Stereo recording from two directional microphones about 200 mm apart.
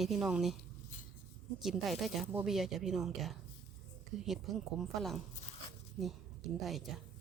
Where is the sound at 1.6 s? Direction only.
Centre (ahead or behind).